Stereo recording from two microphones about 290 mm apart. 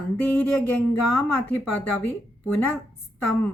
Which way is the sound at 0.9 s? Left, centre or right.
Left.